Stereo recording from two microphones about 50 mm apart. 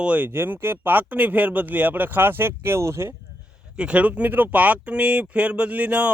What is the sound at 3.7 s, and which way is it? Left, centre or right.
Speech, right.